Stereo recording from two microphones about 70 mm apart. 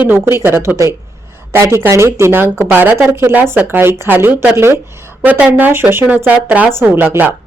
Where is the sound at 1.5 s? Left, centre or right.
Right.